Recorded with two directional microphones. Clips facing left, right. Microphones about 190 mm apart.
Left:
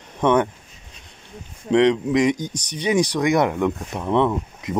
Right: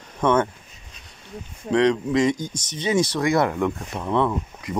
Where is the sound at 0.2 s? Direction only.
15° left (ahead or behind).